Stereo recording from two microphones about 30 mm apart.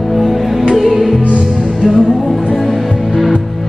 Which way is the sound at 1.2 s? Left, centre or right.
Right.